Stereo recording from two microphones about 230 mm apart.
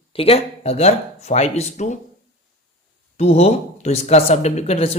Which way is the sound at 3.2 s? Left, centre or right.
Left.